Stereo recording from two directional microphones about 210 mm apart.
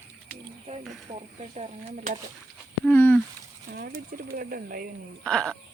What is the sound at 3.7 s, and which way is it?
Speech, 45° right (ahead or behind).